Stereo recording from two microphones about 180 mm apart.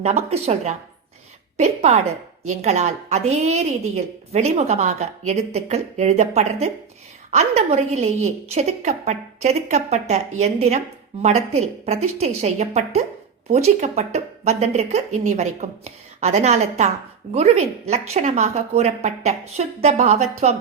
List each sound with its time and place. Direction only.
0.0 s a woman's voice: 35° right (ahead or behind)